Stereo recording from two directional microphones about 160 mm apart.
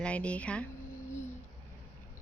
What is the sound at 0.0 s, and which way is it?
Speech, 10° left (ahead or behind).